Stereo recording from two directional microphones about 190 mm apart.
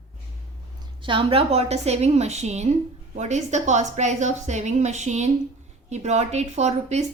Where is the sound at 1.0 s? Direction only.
25° right (ahead or behind).